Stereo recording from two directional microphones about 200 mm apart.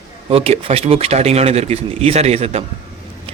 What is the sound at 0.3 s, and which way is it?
A man's voice, 30° right (ahead or behind).